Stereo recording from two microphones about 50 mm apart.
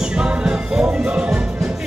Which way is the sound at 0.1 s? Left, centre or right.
Centre.